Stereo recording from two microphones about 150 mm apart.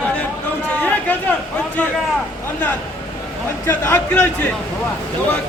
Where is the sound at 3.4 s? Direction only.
15° left (ahead or behind).